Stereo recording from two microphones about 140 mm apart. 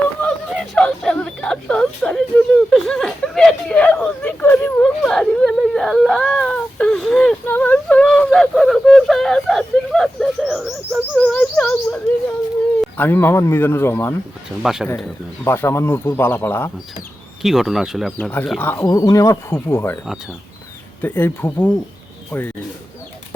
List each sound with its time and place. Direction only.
0.2 s a sound: 5° left (ahead or behind)
11.2 s whimper: 10° left (ahead or behind)
13.0 s speech: 15° left (ahead or behind)
14.6 s speech: 5° right (ahead or behind)
15.4 s speech: 15° left (ahead or behind)
17.4 s speech: centre (ahead or behind)
18.6 s speech: 15° left (ahead or behind)
18.9 s speech: 25° left (ahead or behind)
21.0 s speech: 15° left (ahead or behind)